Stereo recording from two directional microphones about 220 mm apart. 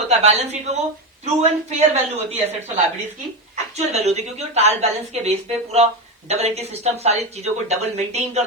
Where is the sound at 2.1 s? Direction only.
30° right (ahead or behind).